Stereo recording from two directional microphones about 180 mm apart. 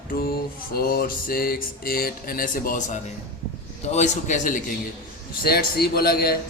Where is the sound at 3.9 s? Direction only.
40° left (ahead or behind).